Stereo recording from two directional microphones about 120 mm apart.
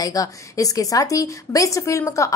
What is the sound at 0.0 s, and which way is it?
A woman's voice, 30° left (ahead or behind).